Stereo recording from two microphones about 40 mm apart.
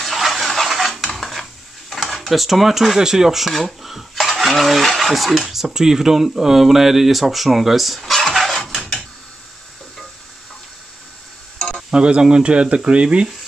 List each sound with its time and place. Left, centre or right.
0.0 s a sound: centre
1.1 s dishes: centre
2.1 s speech: centre
3.5 s dishes: centre
5.5 s speech: centre
11.9 s speech: right